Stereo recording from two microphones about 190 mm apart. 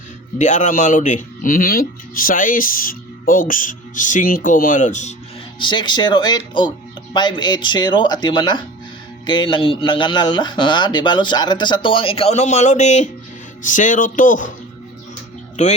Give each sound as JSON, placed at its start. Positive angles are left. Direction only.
{"t": 0.3, "sound": "speech", "side_deg": 40}
{"t": 5.5, "sound": "a man's voice", "side_deg": 25}
{"t": 15.6, "sound": "speech", "side_deg": 40}